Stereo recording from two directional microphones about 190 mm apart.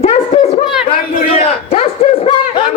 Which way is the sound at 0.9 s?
30° left (ahead or behind).